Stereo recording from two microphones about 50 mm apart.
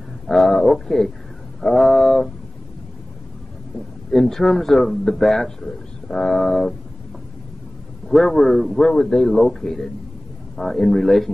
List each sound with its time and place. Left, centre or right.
0.3 s a man's voice: centre
4.1 s a man's voice: centre
8.1 s a man's voice: centre